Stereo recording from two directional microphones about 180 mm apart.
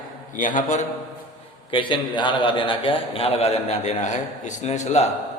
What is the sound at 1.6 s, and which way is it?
A man's voice, 30° left (ahead or behind).